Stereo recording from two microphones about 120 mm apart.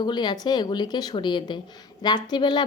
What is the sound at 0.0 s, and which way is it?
A woman's voice, 35° left (ahead or behind).